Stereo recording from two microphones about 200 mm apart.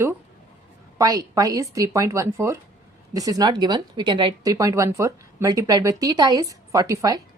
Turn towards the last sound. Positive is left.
turn(degrees=-15)  # may be behind; listen again after turning